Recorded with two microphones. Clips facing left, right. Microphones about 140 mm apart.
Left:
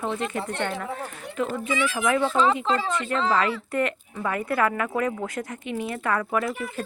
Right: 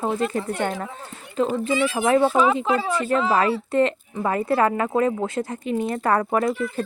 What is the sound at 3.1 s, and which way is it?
Speech, 10° right (ahead or behind).